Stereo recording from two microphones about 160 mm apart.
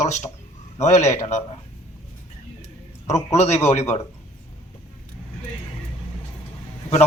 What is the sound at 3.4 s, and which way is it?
Speech, 45° left (ahead or behind).